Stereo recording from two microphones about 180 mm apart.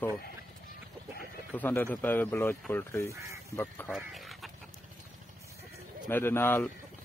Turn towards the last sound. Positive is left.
turn(degrees=10)  # may be behind; listen again after turning